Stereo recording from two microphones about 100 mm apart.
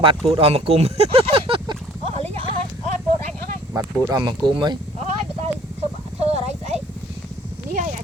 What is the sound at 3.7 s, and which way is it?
Speech, 35° right (ahead or behind).